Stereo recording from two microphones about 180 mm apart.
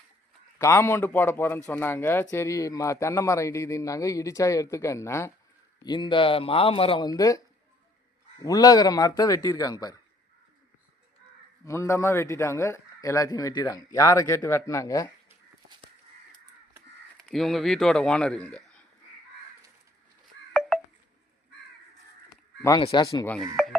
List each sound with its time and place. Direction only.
0.6 s a man's voice: 15° left (ahead or behind)
11.6 s a man's voice: 15° left (ahead or behind)
17.2 s speech: centre (ahead or behind)
20.5 s telephone dialing: centre (ahead or behind)
22.8 s a man's voice: 25° left (ahead or behind)